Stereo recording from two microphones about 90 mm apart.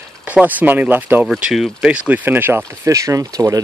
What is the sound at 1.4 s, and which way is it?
Speech, 5° right (ahead or behind).